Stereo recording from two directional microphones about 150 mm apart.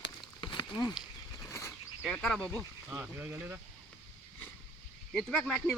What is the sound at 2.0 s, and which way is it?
Speech, 5° left (ahead or behind).